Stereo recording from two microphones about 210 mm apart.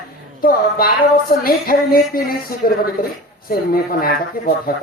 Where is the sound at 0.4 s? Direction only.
45° left (ahead or behind).